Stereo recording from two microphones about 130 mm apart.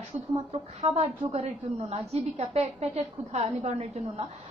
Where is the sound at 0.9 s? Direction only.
55° right (ahead or behind).